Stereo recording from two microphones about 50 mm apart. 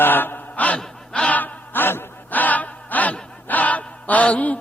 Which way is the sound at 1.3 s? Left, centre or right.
Left.